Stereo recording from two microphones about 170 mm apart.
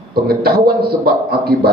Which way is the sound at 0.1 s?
65° right (ahead or behind).